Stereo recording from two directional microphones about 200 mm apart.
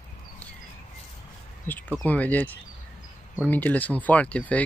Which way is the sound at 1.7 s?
10° left (ahead or behind).